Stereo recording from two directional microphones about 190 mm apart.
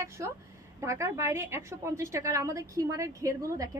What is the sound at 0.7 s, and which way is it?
A woman's voice, 15° right (ahead or behind).